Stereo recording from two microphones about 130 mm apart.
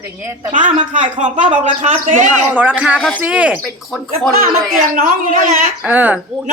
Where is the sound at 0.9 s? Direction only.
70° right (ahead or behind).